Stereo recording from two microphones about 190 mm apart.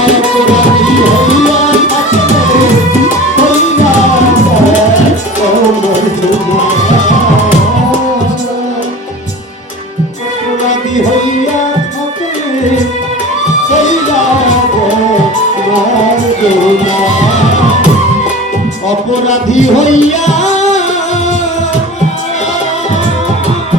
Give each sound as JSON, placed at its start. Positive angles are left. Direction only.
{"t": 13.7, "sound": "music", "side_deg": 40}
{"t": 19.3, "sound": "music", "side_deg": 40}